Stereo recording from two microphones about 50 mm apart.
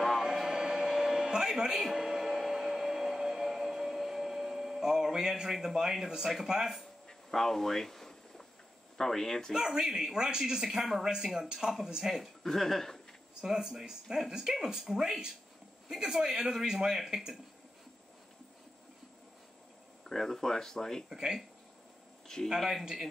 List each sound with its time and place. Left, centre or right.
0.0 s a sound: centre
6.4 s speech: centre
7.1 s a sound: centre
8.9 s speech: centre
9.5 s speech: centre
12.2 s speech: centre
13.4 s speech: centre
20.1 s speech: centre
21.1 s speech: centre
22.6 s speech: centre